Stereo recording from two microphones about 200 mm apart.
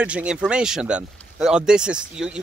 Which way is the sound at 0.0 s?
5° right (ahead or behind).